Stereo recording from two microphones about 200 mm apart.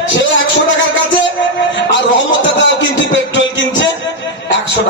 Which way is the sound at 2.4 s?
65° left (ahead or behind).